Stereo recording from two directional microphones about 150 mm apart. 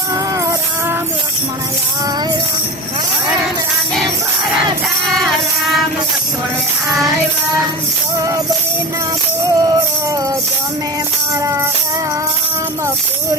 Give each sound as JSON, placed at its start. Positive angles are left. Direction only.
{"t": 0.1, "sound": "music", "side_deg": -20}
{"t": 5.0, "sound": "music", "side_deg": 0}
{"t": 9.5, "sound": "music", "side_deg": -25}
{"t": 11.3, "sound": "music", "side_deg": -20}